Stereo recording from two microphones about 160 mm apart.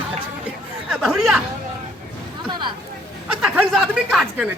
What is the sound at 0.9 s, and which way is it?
Chatter, centre (ahead or behind).